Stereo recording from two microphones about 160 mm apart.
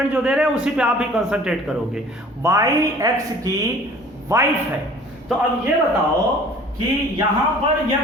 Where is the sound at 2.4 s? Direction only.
20° right (ahead or behind).